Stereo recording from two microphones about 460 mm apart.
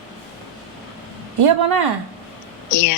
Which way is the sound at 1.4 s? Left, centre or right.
Right.